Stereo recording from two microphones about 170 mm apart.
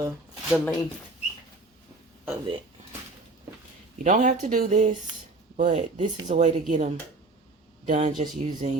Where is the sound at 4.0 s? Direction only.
50° right (ahead or behind).